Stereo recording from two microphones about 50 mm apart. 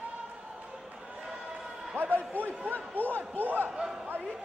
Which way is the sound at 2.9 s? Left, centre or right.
Left.